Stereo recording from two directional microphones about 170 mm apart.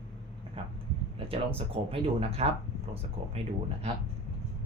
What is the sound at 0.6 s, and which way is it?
Speech, 35° right (ahead or behind).